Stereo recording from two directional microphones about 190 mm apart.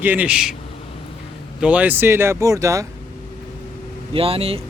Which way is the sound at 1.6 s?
10° right (ahead or behind).